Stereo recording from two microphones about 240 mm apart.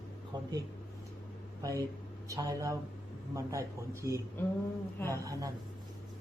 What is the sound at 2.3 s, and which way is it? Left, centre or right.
Speech, centre.